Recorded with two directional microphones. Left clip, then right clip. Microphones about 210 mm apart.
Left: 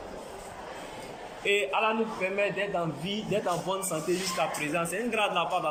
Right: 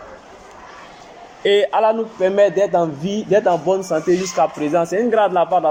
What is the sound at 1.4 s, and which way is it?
A man's voice, 20° right (ahead or behind).